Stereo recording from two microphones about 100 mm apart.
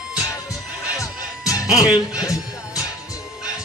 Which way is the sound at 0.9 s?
35° left (ahead or behind).